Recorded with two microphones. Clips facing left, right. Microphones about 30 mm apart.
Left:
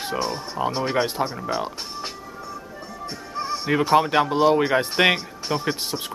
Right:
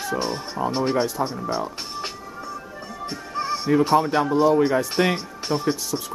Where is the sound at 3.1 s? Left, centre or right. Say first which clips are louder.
Right 2 dB; centre.